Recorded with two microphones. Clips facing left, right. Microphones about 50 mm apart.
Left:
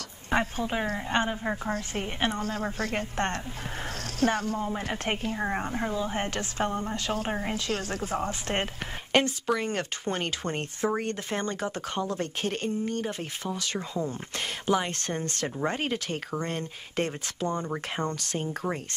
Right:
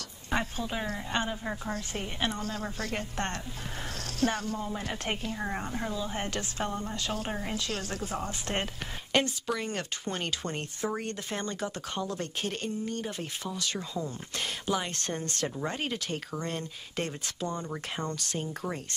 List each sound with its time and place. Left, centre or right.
0.3 s speech: left